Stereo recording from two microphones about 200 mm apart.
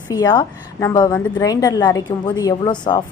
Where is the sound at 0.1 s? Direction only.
20° left (ahead or behind).